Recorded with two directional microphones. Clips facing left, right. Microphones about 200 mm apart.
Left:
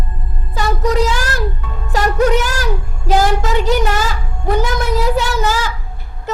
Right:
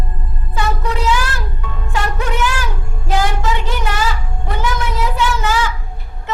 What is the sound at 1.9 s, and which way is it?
Music, 40° left (ahead or behind).